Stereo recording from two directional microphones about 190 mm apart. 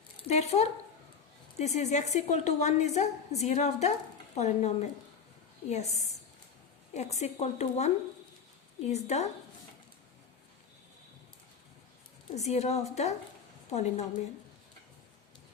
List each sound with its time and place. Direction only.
0.2 s a sound: 35° left (ahead or behind)
1.5 s a woman's voice: 35° left (ahead or behind)
12.3 s a woman's voice: 35° left (ahead or behind)